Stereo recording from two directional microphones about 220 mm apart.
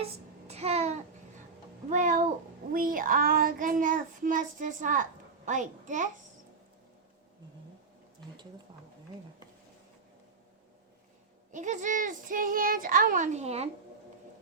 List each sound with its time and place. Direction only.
0.0 s child singing: 30° right (ahead or behind)
11.5 s child singing: 35° right (ahead or behind)